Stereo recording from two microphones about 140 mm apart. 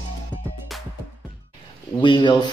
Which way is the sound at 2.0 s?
30° left (ahead or behind).